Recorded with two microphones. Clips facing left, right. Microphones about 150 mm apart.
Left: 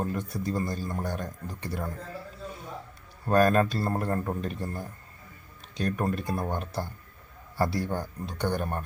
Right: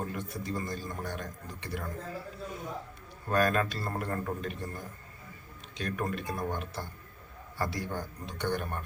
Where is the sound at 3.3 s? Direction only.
35° left (ahead or behind).